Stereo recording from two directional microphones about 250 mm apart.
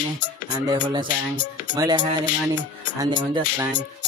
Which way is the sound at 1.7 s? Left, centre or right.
Centre.